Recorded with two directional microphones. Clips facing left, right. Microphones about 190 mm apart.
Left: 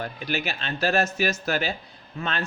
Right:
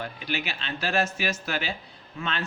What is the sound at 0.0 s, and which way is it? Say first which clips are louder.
Speech: left 3 dB; 45° left (ahead or behind).